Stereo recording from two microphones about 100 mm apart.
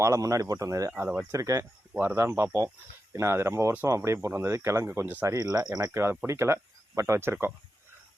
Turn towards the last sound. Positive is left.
turn(degrees=-25)  # may be behind; listen again after turning